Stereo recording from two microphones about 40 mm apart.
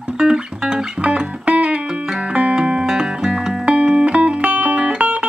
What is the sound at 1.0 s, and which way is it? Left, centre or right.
Music, right.